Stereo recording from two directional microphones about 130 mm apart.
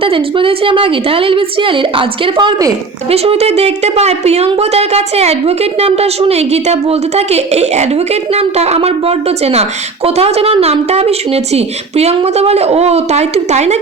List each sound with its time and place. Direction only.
0.0 s a woman's voice: 45° right (ahead or behind)
3.1 s a woman's voice: 50° right (ahead or behind)